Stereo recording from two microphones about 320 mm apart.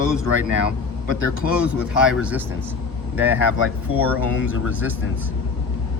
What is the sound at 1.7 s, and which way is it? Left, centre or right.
Speech, centre.